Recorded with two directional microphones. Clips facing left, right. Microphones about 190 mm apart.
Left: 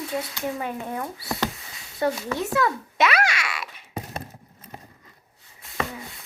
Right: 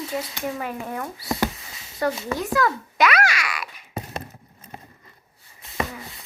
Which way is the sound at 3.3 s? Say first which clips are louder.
Right 1 dB; 25° left (ahead or behind).